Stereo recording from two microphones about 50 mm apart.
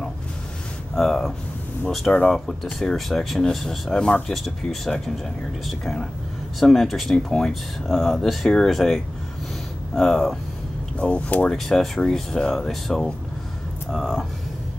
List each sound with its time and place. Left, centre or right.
0.9 s speech: centre
3.9 s speech: centre
4.3 s speech: centre
11.0 s speech: left
11.5 s speech: centre